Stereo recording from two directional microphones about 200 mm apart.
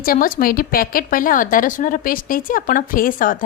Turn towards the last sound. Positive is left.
turn(degrees=45)  # may be behind; listen again after turning